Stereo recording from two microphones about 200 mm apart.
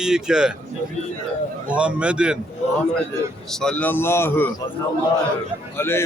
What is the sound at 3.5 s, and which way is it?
Speech, 5° left (ahead or behind).